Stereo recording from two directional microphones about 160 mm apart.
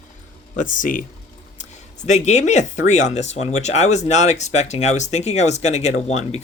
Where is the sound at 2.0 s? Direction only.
45° left (ahead or behind).